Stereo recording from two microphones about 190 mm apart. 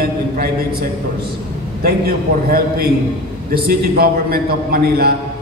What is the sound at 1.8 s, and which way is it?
A man's voice, 50° right (ahead or behind).